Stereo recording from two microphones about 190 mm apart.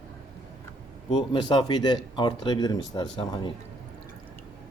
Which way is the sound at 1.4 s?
25° left (ahead or behind).